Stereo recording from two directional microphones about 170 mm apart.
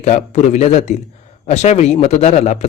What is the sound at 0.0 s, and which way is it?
Speech, 40° left (ahead or behind).